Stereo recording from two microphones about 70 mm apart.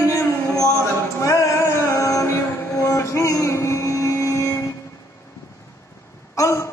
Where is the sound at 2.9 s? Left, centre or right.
Left.